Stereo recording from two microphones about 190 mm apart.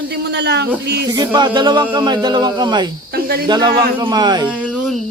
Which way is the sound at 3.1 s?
55° right (ahead or behind).